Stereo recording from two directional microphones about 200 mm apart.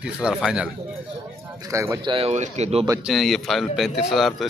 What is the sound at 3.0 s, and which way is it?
Speech, centre (ahead or behind).